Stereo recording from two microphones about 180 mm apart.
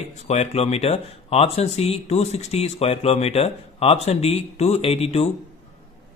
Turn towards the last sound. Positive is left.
turn(degrees=35)  # may be behind; listen again after turning